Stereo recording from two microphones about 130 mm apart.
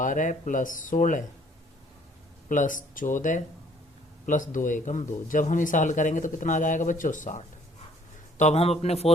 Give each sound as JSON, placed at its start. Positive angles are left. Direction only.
{"t": 0.0, "sound": "speech", "side_deg": 80}
{"t": 2.5, "sound": "speech", "side_deg": 90}
{"t": 8.4, "sound": "a man's voice", "side_deg": 55}